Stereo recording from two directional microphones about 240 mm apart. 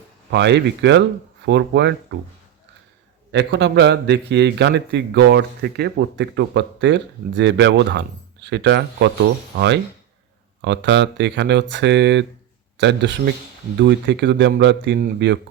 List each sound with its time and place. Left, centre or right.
0.3 s a man's voice: right
3.3 s a man's voice: right